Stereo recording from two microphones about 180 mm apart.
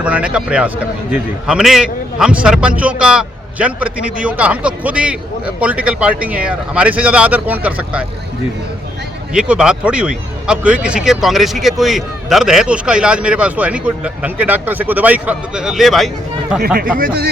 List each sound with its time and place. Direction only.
0.0 s a man's voice: 5° right (ahead or behind)
9.3 s speech: 5° right (ahead or behind)
17.0 s speech: 60° right (ahead or behind)